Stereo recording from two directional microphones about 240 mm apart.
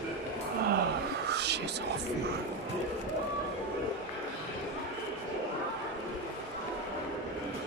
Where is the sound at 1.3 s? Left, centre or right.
Right.